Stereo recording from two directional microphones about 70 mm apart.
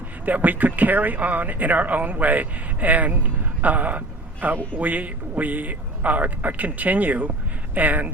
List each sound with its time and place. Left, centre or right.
0.3 s speech: right